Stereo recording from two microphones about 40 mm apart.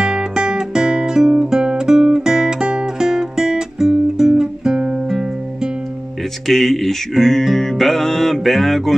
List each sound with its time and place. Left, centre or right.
0.0 s music: centre
6.4 s music: centre